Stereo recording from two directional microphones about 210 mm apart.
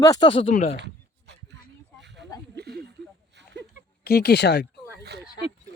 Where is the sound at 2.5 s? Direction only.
50° right (ahead or behind).